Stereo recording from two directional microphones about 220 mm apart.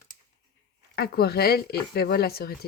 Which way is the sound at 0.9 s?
45° left (ahead or behind).